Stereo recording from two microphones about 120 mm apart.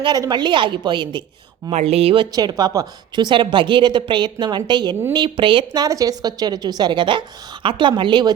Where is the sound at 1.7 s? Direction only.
60° right (ahead or behind).